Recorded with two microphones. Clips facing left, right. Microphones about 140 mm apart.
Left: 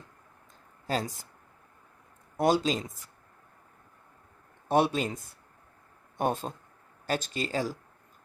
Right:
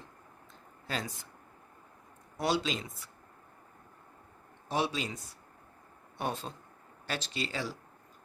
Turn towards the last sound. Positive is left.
turn(degrees=45)  # may be behind; listen again after turning